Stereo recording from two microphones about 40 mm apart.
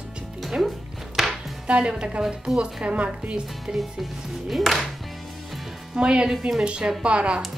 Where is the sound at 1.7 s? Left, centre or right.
Right.